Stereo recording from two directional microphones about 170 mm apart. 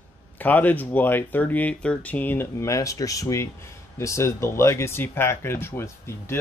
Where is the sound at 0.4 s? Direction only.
10° left (ahead or behind).